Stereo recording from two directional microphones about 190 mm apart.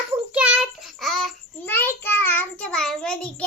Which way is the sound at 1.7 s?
10° left (ahead or behind).